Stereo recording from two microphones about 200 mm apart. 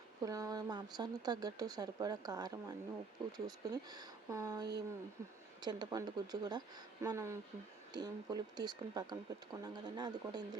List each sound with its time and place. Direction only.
0.2 s speech: 15° right (ahead or behind)